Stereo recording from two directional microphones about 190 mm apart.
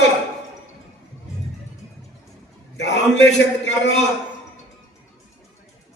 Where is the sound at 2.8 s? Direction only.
65° left (ahead or behind).